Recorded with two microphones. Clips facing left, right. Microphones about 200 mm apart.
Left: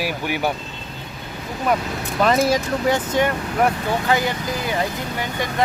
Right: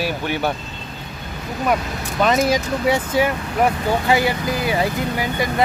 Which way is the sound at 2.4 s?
30° left (ahead or behind).